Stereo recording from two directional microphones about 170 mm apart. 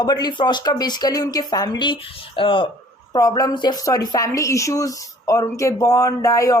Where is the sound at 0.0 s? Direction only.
25° left (ahead or behind).